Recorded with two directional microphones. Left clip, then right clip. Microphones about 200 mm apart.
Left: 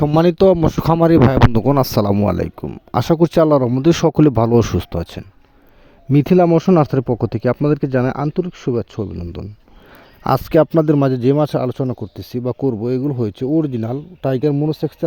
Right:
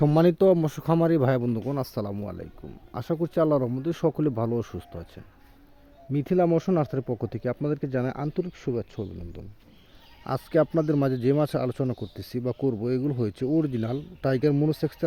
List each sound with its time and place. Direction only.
0.0 s speech: 50° left (ahead or behind); by 14.9 s 30° left (ahead or behind)